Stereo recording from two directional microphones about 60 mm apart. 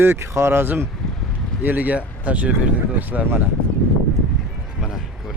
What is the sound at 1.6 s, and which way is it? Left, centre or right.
Speech, right.